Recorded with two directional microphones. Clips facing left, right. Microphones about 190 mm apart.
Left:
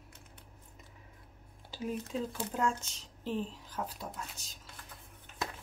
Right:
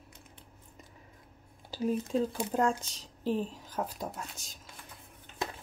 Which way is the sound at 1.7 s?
35° right (ahead or behind).